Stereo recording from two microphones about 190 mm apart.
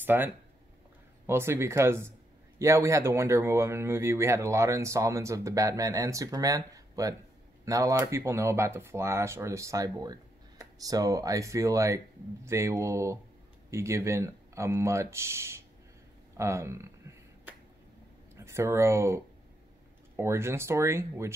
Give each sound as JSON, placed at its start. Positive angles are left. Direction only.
{"t": 0.0, "sound": "speech", "side_deg": -10}
{"t": 18.3, "sound": "speech", "side_deg": -15}